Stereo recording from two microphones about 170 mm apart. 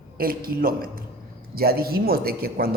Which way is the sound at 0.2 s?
60° right (ahead or behind).